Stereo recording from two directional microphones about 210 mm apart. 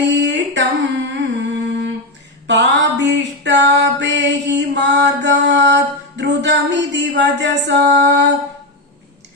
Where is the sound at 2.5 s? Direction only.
55° right (ahead or behind).